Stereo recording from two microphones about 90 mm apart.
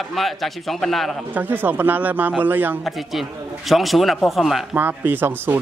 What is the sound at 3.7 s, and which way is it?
Speech, centre (ahead or behind).